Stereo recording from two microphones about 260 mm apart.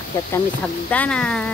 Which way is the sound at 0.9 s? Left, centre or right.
Centre.